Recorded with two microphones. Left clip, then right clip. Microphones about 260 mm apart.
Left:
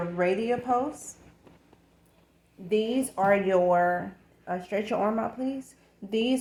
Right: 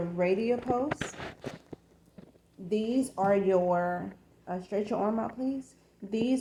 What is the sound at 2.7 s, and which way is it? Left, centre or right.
Speech, left.